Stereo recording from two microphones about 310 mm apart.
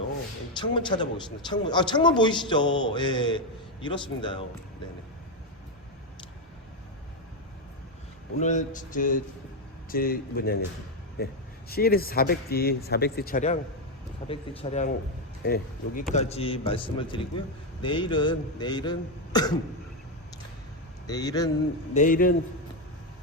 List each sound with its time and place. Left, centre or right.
0.6 s a man's voice: centre
8.4 s speech: left
15.4 s speech: left
16.1 s a man's voice: centre
21.1 s a man's voice: centre
21.9 s speech: left